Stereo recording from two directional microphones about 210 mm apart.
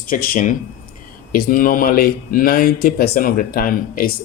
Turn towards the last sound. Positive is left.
turn(degrees=40)  # may be behind; listen again after turning